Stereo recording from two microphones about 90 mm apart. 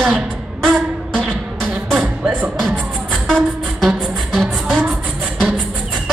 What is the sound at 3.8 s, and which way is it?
Music, centre (ahead or behind).